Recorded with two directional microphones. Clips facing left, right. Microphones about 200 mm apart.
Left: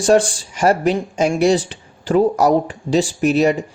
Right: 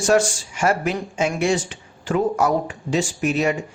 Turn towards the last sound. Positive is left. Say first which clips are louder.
# left 6 dB
turn(degrees=35)  # may be behind; listen again after turning